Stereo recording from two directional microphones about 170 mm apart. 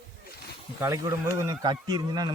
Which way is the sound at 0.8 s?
20° right (ahead or behind).